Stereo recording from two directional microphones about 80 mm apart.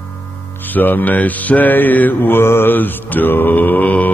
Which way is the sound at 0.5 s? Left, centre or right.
Left.